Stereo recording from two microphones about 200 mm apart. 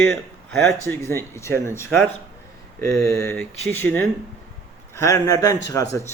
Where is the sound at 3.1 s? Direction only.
10° left (ahead or behind).